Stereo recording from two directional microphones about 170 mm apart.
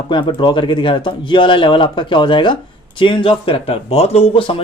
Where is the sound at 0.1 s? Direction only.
30° left (ahead or behind).